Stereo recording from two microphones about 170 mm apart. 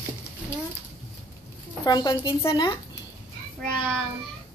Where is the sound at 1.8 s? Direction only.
25° left (ahead or behind).